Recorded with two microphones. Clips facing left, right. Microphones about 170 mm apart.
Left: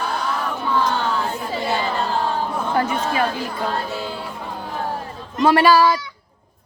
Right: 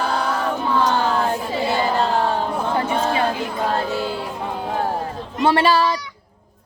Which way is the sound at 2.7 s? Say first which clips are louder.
Left 1 dB; 30° right (ahead or behind).